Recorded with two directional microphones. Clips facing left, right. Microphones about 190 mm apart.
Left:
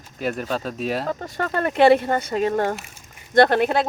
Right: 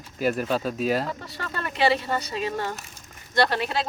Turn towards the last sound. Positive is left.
turn(degrees=55)  # may be behind; listen again after turning